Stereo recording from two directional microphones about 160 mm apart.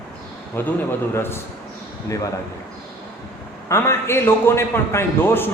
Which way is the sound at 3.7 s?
15° left (ahead or behind).